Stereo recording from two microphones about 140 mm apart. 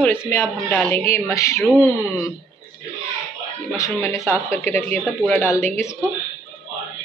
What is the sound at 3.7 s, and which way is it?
Speech, 20° left (ahead or behind).